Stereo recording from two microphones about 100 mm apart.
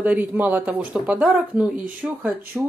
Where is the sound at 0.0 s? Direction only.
15° right (ahead or behind).